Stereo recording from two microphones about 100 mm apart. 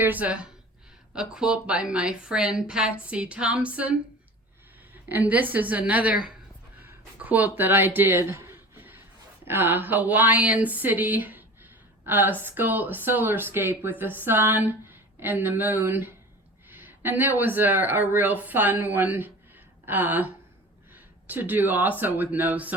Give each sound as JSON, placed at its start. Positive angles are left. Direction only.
{"t": 0.0, "sound": "a woman's voice", "side_deg": -15}
{"t": 5.0, "sound": "a woman's voice", "side_deg": -20}
{"t": 7.9, "sound": "a sound", "side_deg": -20}
{"t": 9.4, "sound": "a woman's voice", "side_deg": -20}